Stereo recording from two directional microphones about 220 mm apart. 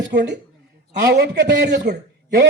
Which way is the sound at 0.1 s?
50° right (ahead or behind).